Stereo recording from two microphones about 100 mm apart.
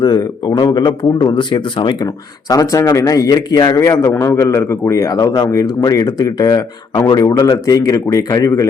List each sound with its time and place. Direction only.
0.0 s a man's voice: 40° left (ahead or behind)
2.5 s a man's voice: 35° left (ahead or behind)